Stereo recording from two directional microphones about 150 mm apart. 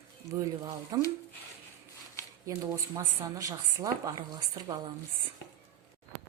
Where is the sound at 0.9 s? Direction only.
25° right (ahead or behind).